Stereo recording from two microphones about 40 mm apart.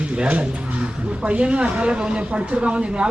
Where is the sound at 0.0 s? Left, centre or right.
Right.